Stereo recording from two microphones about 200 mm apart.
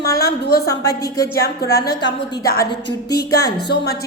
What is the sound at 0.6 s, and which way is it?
Speech, 15° left (ahead or behind).